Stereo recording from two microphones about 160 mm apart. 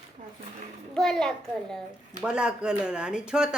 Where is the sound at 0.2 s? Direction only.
55° right (ahead or behind).